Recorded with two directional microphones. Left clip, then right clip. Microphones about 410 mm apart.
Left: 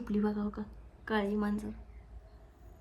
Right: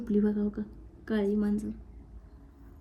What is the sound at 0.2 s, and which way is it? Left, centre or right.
Speech, left.